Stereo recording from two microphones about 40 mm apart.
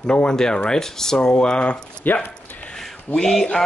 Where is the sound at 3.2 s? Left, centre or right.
Centre.